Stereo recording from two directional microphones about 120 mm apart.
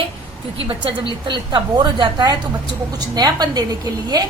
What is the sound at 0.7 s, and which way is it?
A woman's voice, 45° right (ahead or behind).